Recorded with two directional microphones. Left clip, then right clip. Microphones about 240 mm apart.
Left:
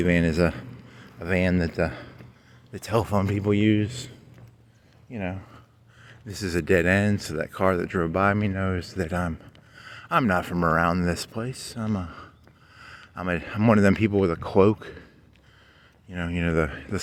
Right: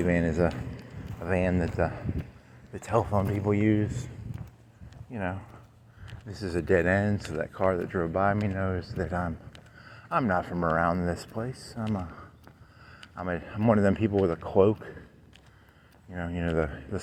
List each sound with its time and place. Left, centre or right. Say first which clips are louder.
0.0 s speech: left 3 dB; left
3.3 s speech: left 5 dB; left
3.7 s speech: left 3 dB; left
5.1 s speech: left 1 dB; left
11.3 s speech: left 3 dB; left
12.0 s a sound: left 4 dB; left
13.1 s speech: left 5 dB; left
16.1 s speech: left 4 dB; left